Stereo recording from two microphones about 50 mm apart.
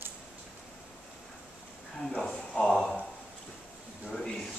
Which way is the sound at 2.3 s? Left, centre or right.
Left.